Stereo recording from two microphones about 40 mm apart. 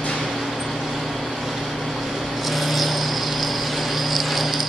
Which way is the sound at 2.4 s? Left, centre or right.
Centre.